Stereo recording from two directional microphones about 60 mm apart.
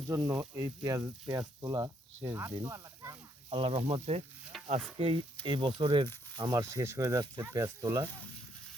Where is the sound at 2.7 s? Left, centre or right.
Right.